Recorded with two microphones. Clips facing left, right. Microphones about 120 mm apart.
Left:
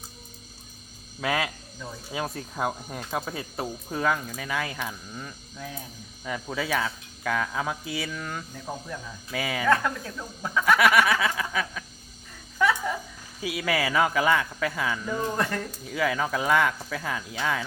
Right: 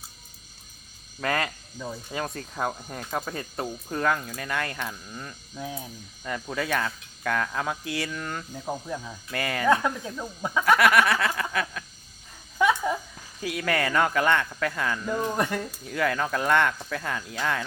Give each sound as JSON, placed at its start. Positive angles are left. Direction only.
{"t": 1.2, "sound": "speech", "side_deg": 5}
{"t": 5.5, "sound": "speech", "side_deg": -15}
{"t": 6.2, "sound": "speech", "side_deg": 0}
{"t": 8.5, "sound": "speech", "side_deg": -15}
{"t": 9.3, "sound": "speech", "side_deg": 0}
{"t": 9.6, "sound": "speech", "side_deg": -15}
{"t": 10.8, "sound": "speech", "side_deg": 0}
{"t": 12.6, "sound": "a sound", "side_deg": -20}
{"t": 13.4, "sound": "speech", "side_deg": 5}
{"t": 15.2, "sound": "speech", "side_deg": -10}
{"t": 15.9, "sound": "speech", "side_deg": 5}